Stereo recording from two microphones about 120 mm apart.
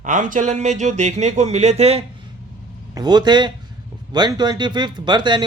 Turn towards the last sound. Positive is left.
turn(degrees=-40)  # may be behind; listen again after turning